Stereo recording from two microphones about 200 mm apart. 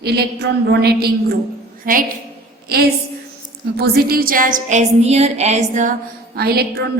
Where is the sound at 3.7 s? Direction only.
50° right (ahead or behind).